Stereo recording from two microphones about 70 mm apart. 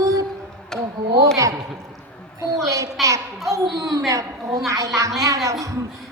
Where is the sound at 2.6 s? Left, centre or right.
Right.